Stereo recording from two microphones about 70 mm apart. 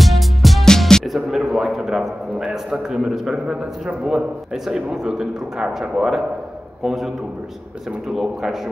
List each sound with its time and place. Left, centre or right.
0.0 s a man's voice: centre
8.1 s speech: centre